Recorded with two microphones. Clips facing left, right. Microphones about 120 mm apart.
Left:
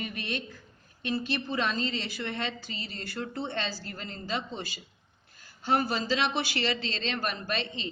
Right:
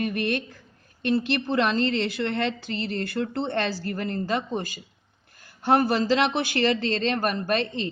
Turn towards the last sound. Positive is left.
turn(degrees=-50)  # may be behind; listen again after turning